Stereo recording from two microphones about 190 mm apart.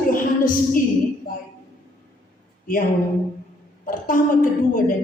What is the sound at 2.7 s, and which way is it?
Speech, 45° left (ahead or behind).